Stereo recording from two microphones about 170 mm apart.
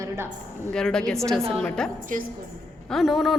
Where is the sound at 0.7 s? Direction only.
5° left (ahead or behind).